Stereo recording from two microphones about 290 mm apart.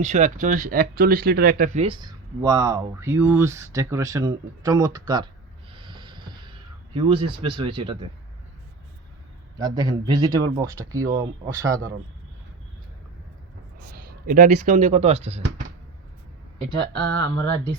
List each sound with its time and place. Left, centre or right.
0.0 s speech: right
5.7 s a sound: centre
9.6 s speech: centre
13.8 s speech: right
17.3 s speech: centre